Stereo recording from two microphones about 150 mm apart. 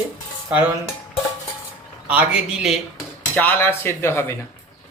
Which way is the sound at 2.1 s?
10° right (ahead or behind).